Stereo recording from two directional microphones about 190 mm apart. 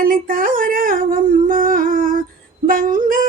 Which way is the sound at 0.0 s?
50° right (ahead or behind).